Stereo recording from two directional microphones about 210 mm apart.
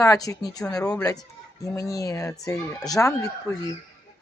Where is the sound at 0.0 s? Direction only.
15° left (ahead or behind).